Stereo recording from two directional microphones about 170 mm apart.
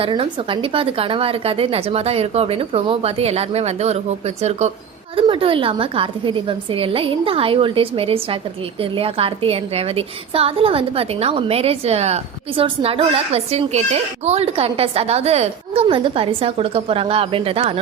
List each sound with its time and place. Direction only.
0.0 s a woman's voice: 30° right (ahead or behind)